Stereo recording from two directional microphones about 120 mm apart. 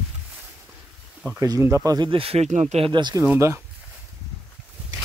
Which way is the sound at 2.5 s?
65° right (ahead or behind).